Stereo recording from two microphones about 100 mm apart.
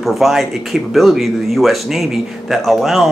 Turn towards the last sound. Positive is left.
turn(degrees=0)  # may be behind; listen again after turning